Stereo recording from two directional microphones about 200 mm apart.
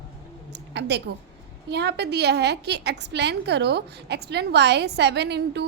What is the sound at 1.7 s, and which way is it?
A woman's voice, 55° right (ahead or behind).